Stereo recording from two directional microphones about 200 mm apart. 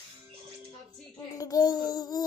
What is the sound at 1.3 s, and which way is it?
Child singing, 20° left (ahead or behind).